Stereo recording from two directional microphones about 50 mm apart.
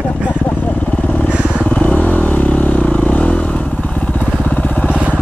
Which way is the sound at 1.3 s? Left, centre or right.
Right.